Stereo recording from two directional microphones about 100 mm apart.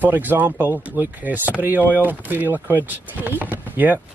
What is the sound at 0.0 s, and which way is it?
A man's voice, 20° right (ahead or behind).